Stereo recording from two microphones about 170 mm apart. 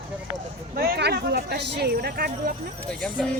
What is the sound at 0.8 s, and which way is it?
Speech, 75° right (ahead or behind).